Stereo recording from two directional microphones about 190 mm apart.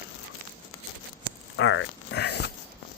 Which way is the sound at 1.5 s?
80° left.